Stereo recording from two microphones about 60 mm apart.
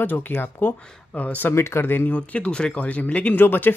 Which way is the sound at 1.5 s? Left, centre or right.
Left.